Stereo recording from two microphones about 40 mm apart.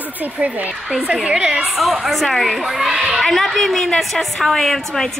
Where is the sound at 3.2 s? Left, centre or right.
Centre.